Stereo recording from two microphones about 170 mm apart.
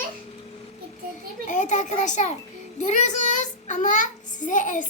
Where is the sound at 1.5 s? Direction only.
45° left (ahead or behind).